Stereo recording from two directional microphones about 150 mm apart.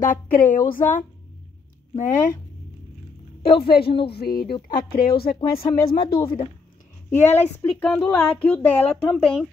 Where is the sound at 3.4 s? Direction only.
90° left.